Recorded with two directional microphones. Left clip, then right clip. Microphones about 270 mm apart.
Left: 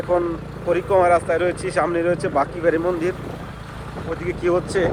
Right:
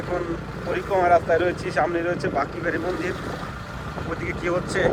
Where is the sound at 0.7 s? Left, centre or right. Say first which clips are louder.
Left 3 dB; centre.